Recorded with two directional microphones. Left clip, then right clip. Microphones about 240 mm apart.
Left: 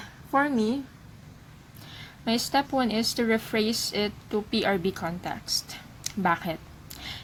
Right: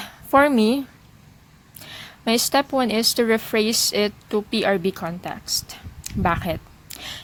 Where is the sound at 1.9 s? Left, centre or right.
Right.